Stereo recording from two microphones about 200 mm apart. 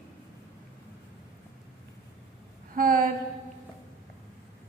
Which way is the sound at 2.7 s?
45° right (ahead or behind).